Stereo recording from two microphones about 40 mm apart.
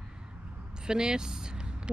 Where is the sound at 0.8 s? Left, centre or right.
Centre.